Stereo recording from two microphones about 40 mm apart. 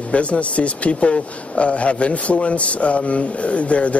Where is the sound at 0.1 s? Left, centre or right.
Left.